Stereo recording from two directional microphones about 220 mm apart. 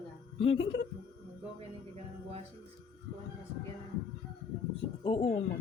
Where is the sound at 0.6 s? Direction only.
55° left (ahead or behind).